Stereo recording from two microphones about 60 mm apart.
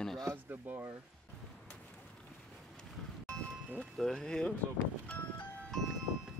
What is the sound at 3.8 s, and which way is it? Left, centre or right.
Speech, centre.